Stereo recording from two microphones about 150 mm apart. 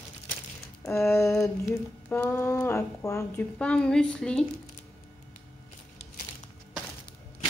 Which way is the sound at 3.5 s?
5° left (ahead or behind).